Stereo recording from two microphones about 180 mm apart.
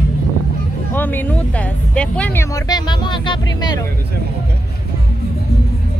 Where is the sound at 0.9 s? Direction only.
10° left (ahead or behind).